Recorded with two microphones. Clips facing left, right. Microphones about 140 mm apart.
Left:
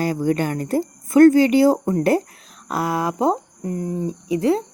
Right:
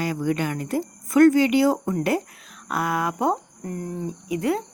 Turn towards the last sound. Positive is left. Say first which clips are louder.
# left 5 dB
turn(degrees=30)  # may be behind; listen again after turning